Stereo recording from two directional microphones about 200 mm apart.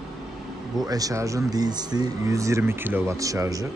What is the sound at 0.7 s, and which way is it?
Speech, 20° right (ahead or behind).